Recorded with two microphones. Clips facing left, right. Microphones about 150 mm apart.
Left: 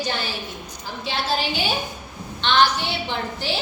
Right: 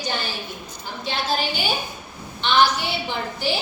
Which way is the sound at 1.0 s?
Centre (ahead or behind).